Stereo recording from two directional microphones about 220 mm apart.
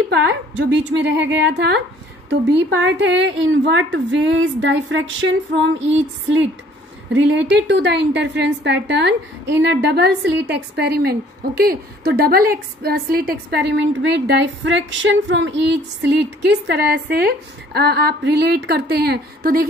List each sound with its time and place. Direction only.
0.1 s a woman's voice: 55° right (ahead or behind)
7.2 s a woman's voice: 55° right (ahead or behind)